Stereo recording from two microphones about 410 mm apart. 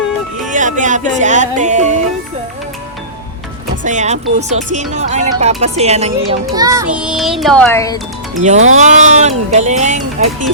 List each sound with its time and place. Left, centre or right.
0.4 s music: centre
3.8 s a child's voice: centre
8.4 s a child's voice: centre